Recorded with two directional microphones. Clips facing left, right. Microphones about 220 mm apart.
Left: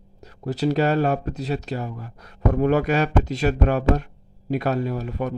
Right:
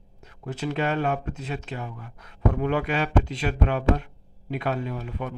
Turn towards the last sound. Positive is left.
turn(degrees=40)  # may be behind; listen again after turning